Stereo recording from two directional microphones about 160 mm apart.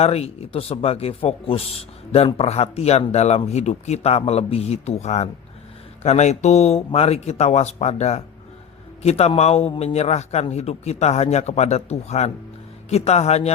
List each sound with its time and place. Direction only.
0.0 s a man's voice: 40° left (ahead or behind)